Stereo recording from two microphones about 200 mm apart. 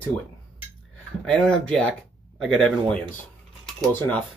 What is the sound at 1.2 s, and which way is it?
Speech, 5° left (ahead or behind).